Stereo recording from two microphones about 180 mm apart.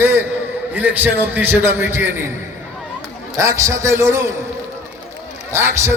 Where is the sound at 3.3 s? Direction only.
15° right (ahead or behind).